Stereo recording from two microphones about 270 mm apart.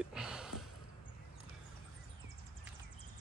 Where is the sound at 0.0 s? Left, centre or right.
Centre.